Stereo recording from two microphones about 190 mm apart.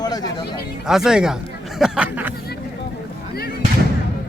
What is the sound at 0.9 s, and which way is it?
Speech, 5° right (ahead or behind).